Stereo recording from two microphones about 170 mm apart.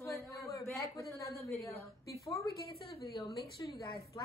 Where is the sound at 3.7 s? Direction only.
20° left (ahead or behind).